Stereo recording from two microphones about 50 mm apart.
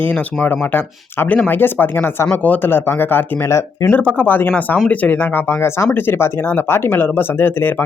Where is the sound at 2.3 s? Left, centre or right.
Left.